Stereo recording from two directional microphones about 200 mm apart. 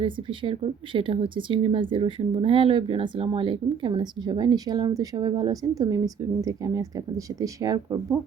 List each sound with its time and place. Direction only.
0.0 s speech: 25° right (ahead or behind)